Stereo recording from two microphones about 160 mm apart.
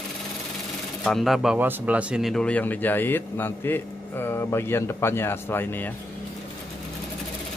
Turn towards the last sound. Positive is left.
turn(degrees=10)  # may be behind; listen again after turning